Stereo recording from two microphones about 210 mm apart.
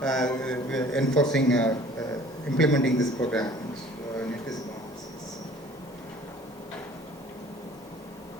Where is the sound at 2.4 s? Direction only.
5° left (ahead or behind).